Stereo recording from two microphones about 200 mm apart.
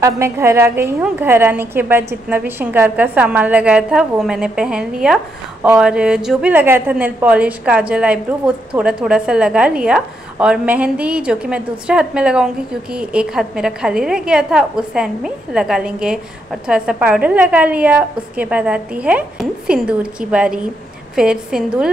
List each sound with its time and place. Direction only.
0.0 s a woman's voice: 15° right (ahead or behind)